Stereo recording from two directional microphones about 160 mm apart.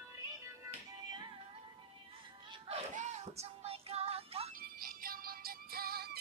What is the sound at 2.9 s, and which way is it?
Music, 45° right (ahead or behind).